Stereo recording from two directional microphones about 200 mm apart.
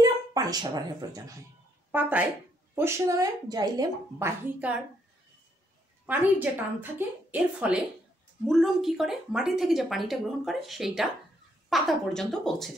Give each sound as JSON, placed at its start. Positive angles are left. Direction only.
{"t": 0.0, "sound": "a woman's voice", "side_deg": -20}
{"t": 4.6, "sound": "speech", "side_deg": -5}
{"t": 6.0, "sound": "a woman's voice", "side_deg": -10}